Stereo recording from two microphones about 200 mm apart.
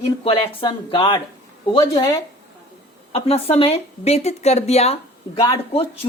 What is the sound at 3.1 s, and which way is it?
A woman's voice, 30° left (ahead or behind).